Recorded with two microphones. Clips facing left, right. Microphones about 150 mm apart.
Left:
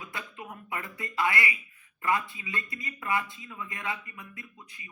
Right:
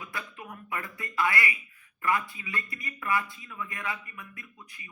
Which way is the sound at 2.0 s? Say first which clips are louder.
Even; 25° left (ahead or behind).